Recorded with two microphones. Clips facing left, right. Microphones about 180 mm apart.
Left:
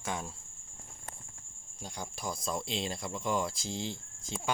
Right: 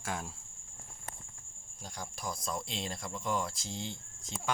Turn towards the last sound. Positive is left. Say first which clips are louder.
# left 3 dB
turn(degrees=0)  # may be behind; listen again after turning